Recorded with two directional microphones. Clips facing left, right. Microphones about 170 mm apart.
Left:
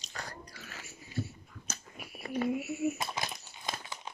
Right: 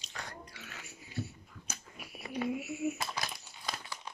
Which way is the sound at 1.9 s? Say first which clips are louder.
Left 2 dB; centre (ahead or behind).